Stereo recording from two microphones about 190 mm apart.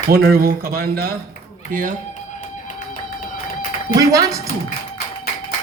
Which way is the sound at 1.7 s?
45° right (ahead or behind).